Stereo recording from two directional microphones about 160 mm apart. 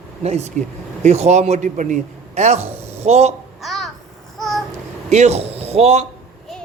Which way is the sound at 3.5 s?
Centre (ahead or behind).